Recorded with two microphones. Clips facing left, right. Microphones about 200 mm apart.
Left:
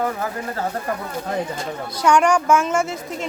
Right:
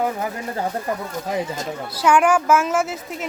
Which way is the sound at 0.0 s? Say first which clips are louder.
Even; 15° right (ahead or behind).